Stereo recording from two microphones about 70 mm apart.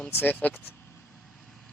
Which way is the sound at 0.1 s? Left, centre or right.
Left.